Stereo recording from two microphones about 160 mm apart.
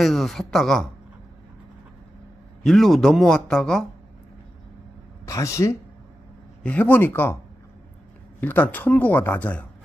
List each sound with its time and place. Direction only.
0.0 s a man's voice: centre (ahead or behind)
2.6 s a man's voice: centre (ahead or behind)
5.2 s speech: 20° left (ahead or behind)
8.4 s speech: 10° left (ahead or behind)